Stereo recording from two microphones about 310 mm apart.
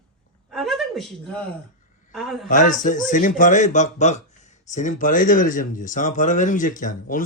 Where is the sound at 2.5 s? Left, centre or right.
Left.